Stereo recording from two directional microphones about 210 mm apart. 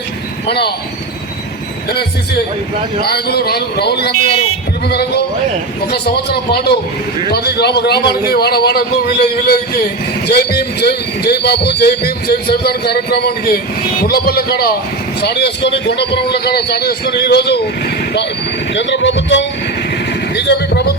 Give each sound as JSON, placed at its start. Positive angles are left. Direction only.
{"t": 0.4, "sound": "a man's voice", "side_deg": 50}
{"t": 1.9, "sound": "a man's voice", "side_deg": 50}
{"t": 18.7, "sound": "a man's voice", "side_deg": 60}
{"t": 20.3, "sound": "a sound", "side_deg": 50}